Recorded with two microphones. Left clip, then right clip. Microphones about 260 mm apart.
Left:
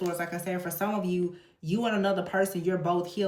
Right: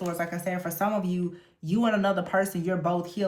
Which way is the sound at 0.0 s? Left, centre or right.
Right.